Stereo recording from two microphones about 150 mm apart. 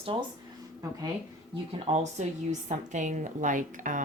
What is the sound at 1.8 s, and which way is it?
A woman's voice, 50° right (ahead or behind).